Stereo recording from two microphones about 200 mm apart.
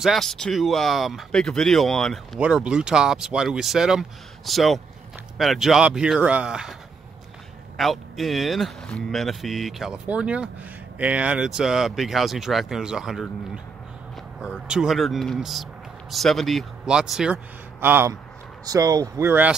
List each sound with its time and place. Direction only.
0.0 s speech: centre (ahead or behind)
7.7 s speech: centre (ahead or behind)
14.4 s speech: 5° right (ahead or behind)